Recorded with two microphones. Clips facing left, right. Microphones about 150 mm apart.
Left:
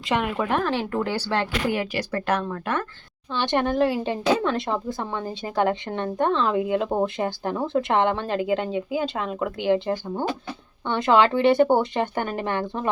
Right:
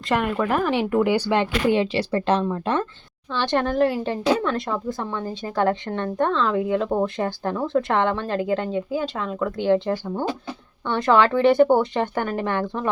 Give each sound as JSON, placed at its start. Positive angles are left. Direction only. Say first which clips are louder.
{"t": 0.1, "sound": "speech", "louder": "right 2 dB", "side_deg": 0}
{"t": 0.7, "sound": "speech", "louder": "right 5 dB", "side_deg": -15}
{"t": 3.4, "sound": "speech", "louder": "right 1 dB", "side_deg": 20}